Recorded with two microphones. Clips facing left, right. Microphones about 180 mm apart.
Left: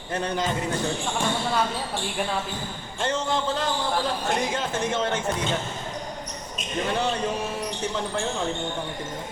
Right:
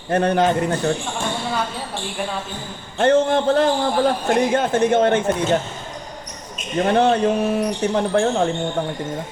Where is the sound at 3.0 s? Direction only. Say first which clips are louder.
Right 10 dB; 60° right (ahead or behind).